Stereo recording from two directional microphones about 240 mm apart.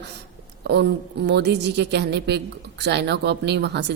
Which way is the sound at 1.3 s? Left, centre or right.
Right.